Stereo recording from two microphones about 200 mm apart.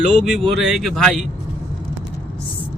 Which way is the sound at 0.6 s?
Centre (ahead or behind).